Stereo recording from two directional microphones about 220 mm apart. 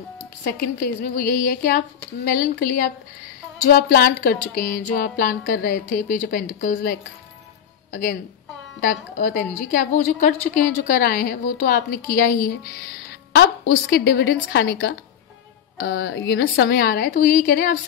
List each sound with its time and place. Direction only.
0.4 s a woman's voice: 45° left (ahead or behind)
2.2 s music: 40° left (ahead or behind)
7.9 s a woman's voice: 40° left (ahead or behind)
8.8 s music: 40° left (ahead or behind)
13.3 s a woman's voice: 45° left (ahead or behind)